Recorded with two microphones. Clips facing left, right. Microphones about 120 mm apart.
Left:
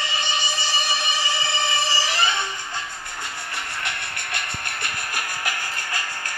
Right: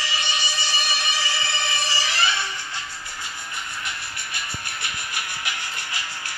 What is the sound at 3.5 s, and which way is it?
Music, 65° left (ahead or behind).